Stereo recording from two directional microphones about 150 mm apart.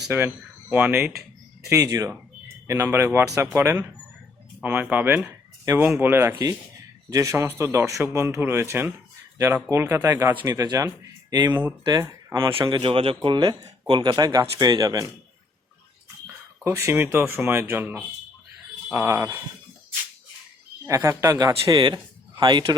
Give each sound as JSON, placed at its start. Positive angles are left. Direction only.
{"t": 0.1, "sound": "speech", "side_deg": -15}
{"t": 1.6, "sound": "a man's voice", "side_deg": -20}
{"t": 16.6, "sound": "speech", "side_deg": -15}
{"t": 20.8, "sound": "speech", "side_deg": -20}